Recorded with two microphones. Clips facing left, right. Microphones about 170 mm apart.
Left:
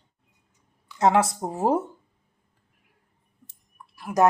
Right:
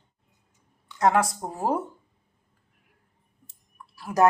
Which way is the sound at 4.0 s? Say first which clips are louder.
Left 1 dB; 15° left (ahead or behind).